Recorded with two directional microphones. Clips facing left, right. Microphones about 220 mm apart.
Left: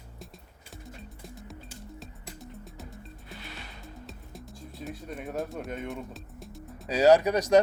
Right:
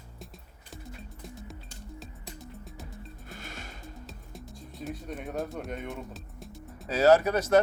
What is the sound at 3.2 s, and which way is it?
Music, 45° right (ahead or behind).